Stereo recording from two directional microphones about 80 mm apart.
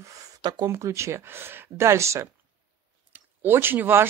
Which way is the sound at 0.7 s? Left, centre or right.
Right.